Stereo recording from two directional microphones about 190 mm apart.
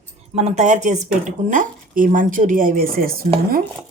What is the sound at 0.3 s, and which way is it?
Speech, 35° right (ahead or behind).